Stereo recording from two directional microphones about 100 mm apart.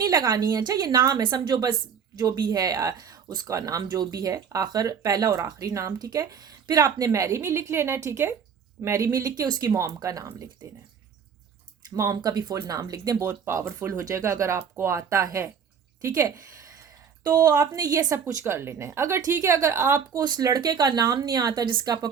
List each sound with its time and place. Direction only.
0.0 s a woman's voice: 40° right (ahead or behind)
11.9 s speech: 35° right (ahead or behind)
13.2 s speech: 25° right (ahead or behind)
20.1 s speech: 40° right (ahead or behind)